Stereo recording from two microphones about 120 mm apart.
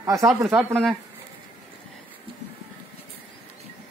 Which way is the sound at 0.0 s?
25° right (ahead or behind).